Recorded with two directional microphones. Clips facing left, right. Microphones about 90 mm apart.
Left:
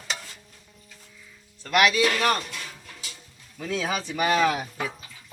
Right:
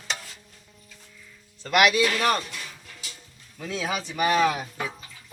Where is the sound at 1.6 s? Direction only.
5° right (ahead or behind).